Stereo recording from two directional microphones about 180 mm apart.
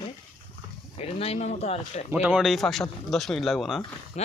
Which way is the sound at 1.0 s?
35° left (ahead or behind).